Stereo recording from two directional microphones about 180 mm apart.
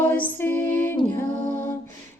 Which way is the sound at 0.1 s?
10° left (ahead or behind).